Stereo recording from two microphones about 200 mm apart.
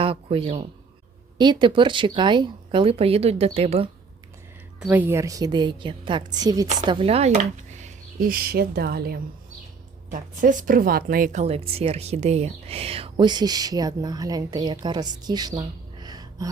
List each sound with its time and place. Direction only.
0.0 s a man's voice: 30° right (ahead or behind)
4.8 s a woman's voice: 10° right (ahead or behind)